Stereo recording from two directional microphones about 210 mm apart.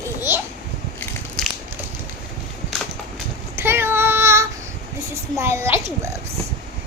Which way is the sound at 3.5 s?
10° right (ahead or behind).